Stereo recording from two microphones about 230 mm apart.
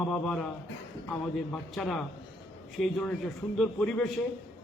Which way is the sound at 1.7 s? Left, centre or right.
Centre.